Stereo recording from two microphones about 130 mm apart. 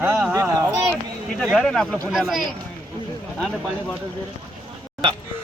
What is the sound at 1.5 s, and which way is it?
Speech, 5° left (ahead or behind).